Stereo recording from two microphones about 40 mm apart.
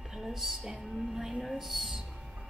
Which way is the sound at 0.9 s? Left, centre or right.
Centre.